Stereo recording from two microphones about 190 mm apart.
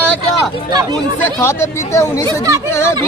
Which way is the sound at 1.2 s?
15° left (ahead or behind).